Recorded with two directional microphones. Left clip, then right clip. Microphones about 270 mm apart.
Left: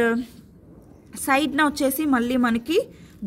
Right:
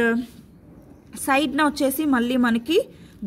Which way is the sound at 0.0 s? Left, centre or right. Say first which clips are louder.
Even; centre.